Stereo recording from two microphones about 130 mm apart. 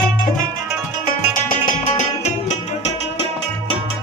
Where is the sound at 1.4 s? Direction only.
70° left (ahead or behind).